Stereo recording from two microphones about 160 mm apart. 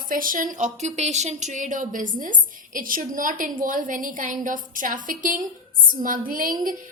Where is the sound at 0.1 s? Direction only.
60° right (ahead or behind).